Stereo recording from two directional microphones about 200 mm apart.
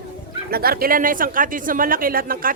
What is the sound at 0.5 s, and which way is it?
Speech, 50° right (ahead or behind).